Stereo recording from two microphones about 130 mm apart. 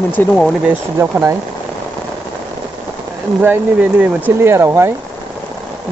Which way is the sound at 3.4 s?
15° right (ahead or behind).